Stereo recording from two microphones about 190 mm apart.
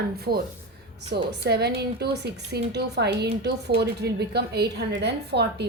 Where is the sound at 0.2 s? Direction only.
55° right (ahead or behind).